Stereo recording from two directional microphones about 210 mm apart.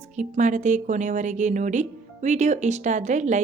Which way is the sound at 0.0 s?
35° right (ahead or behind).